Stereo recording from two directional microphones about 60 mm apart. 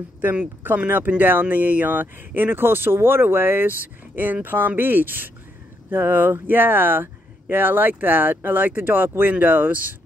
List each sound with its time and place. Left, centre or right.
0.8 s speech: right